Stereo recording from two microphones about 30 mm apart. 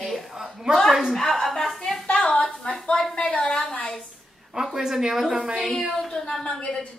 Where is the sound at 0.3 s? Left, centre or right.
Centre.